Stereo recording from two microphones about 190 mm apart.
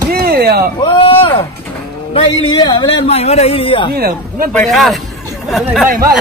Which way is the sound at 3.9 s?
55° right (ahead or behind).